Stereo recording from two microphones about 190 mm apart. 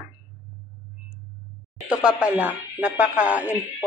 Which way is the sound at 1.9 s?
5° right (ahead or behind).